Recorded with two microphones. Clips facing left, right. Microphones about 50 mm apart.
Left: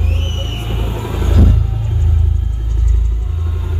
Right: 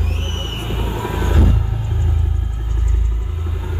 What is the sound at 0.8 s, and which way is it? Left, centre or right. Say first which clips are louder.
Vehicle: right 2 dB; centre.